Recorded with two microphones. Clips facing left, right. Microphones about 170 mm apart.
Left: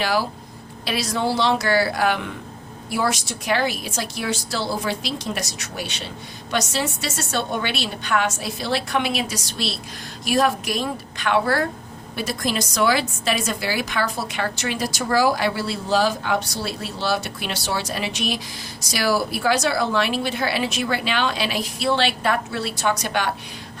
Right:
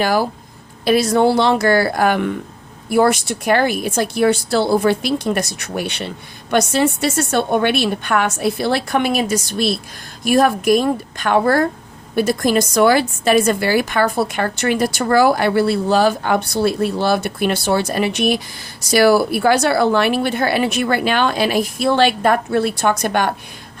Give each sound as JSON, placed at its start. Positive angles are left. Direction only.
{"t": 0.0, "sound": "a woman's voice", "side_deg": -50}